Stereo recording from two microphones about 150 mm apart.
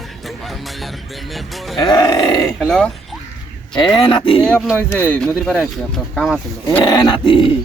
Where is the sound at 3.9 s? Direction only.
30° left (ahead or behind).